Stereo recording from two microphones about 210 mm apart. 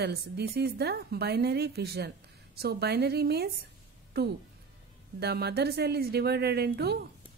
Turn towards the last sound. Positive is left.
turn(degrees=-50)  # may be behind; listen again after turning